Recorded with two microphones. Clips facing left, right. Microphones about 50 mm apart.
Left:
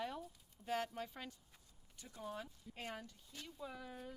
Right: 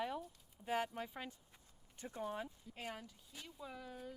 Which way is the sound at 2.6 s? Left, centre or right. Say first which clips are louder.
Even; centre.